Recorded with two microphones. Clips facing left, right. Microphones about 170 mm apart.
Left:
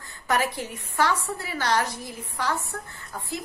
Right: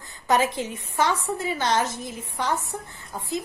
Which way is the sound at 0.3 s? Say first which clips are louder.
Right 3 dB; 20° right (ahead or behind).